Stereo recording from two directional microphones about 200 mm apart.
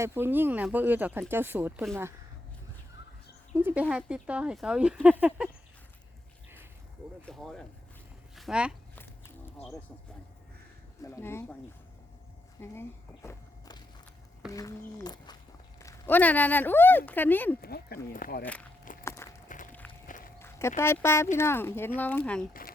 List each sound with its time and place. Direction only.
0.0 s speech: 10° right (ahead or behind)
3.6 s speech: 10° right (ahead or behind)
7.3 s speech: 5° left (ahead or behind)
11.0 s speech: 15° left (ahead or behind)
12.5 s walk: 10° left (ahead or behind)
14.5 s speech: 15° left (ahead or behind)
17.6 s speech: 50° left (ahead or behind)
19.0 s a sound: 15° left (ahead or behind)
19.5 s a sound: 40° left (ahead or behind)
20.1 s walk: 40° left (ahead or behind)
20.4 s speech: 10° left (ahead or behind)